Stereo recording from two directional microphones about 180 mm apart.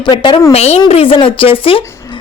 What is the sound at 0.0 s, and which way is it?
A woman's voice, 25° left (ahead or behind).